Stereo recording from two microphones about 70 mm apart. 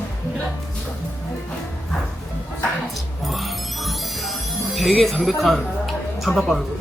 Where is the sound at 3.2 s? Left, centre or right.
Centre.